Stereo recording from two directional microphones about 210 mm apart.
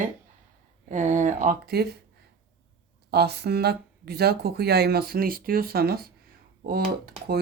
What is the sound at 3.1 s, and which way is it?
Speech, 50° right (ahead or behind).